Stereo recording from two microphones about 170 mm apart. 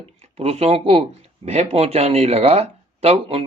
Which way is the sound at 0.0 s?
35° right (ahead or behind).